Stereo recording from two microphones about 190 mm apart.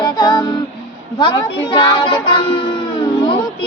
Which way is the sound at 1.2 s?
25° left (ahead or behind).